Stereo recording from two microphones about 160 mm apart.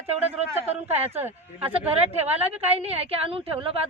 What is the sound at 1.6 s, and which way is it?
A woman's voice, 35° right (ahead or behind).